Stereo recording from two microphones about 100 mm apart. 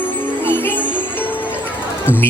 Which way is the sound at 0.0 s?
20° left (ahead or behind).